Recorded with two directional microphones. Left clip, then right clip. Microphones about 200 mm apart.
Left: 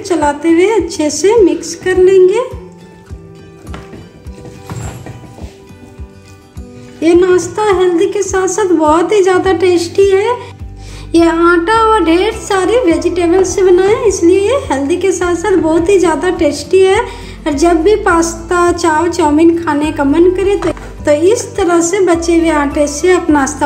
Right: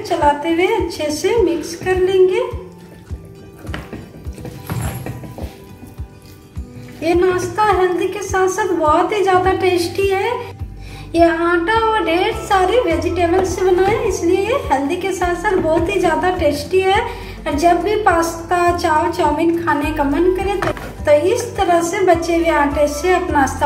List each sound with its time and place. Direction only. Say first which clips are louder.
0.2 s speech: left 4 dB; 55° left (ahead or behind)
7.0 s a woman's voice: left 7 dB; 50° left (ahead or behind)